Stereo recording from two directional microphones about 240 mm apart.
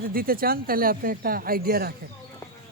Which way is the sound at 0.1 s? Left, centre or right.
Right.